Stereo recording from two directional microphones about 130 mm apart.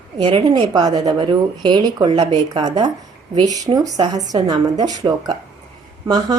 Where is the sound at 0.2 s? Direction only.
40° right (ahead or behind).